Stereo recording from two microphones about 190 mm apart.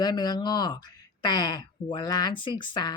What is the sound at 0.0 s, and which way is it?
Speech, 20° left (ahead or behind).